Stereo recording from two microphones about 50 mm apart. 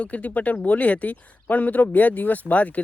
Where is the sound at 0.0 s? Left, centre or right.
Left.